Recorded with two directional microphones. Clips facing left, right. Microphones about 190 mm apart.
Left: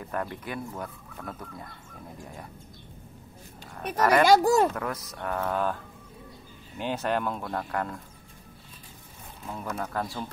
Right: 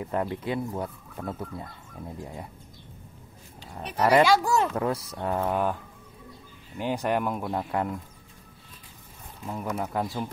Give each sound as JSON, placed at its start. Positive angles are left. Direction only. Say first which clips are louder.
{"t": 0.0, "sound": "speech", "louder": "right 4 dB", "side_deg": -20}
{"t": 4.0, "sound": "speech", "louder": "right 1 dB", "side_deg": -20}
{"t": 4.3, "sound": "speech", "louder": "left 3 dB", "side_deg": 40}
{"t": 4.7, "sound": "speech", "louder": "right 5 dB", "side_deg": -30}
{"t": 6.8, "sound": "speech", "louder": "right 2 dB", "side_deg": -10}
{"t": 9.5, "sound": "speech", "louder": "right 3 dB", "side_deg": -15}